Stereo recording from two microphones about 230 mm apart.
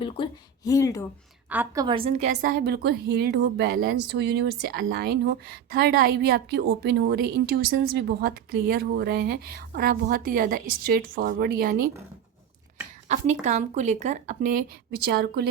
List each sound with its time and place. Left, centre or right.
0.0 s a woman's voice: centre
1.5 s a woman's voice: centre; by 11.9 s right
13.4 s a woman's voice: right